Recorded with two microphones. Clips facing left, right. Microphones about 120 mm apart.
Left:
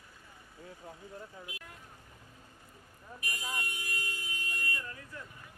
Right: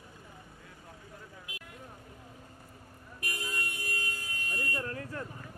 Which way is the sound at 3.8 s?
50° right (ahead or behind).